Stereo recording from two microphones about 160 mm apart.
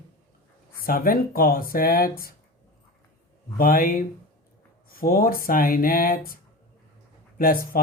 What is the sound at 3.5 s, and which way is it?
Speech, 65° left (ahead or behind).